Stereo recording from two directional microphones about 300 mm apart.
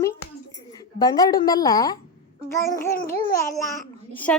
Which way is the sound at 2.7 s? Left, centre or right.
Left.